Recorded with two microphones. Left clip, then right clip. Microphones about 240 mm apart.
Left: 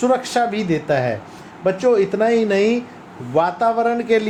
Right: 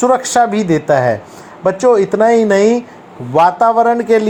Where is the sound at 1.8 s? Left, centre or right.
Centre.